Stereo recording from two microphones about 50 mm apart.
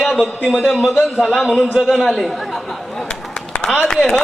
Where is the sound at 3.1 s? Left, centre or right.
Left.